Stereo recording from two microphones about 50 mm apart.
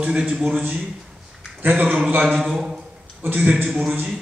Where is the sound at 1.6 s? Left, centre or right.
Right.